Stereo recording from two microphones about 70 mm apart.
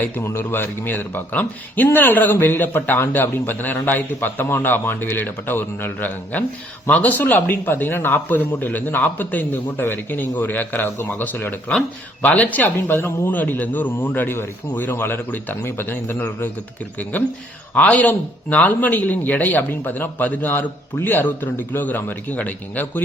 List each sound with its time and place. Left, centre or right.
0.3 s speech: left